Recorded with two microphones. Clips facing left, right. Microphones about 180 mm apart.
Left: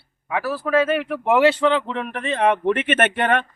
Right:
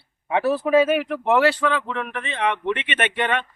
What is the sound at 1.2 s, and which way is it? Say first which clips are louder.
Speech: left 3 dB; 15° left (ahead or behind).